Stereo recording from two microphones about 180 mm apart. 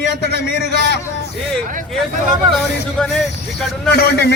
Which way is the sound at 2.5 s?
5° left (ahead or behind).